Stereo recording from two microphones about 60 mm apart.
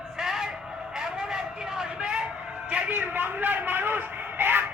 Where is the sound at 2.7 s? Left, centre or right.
Right.